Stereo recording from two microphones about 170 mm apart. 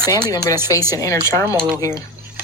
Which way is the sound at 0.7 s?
20° left (ahead or behind).